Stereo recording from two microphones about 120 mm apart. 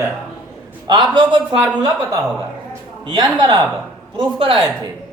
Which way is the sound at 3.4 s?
35° right (ahead or behind).